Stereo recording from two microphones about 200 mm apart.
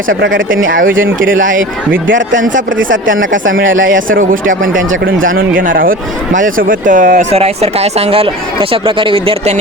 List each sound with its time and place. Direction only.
0.1 s speech: 80° right
0.6 s speech: 70° right (ahead or behind)
1.4 s speech: 40° right (ahead or behind)
1.9 s speech: 70° right (ahead or behind)
3.9 s speech: 45° right (ahead or behind)
5.4 s speech: 45° right (ahead or behind); by 9.6 s 30° right (ahead or behind)